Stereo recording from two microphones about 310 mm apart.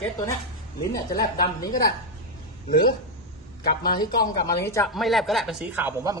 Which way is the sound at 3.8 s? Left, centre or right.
Centre.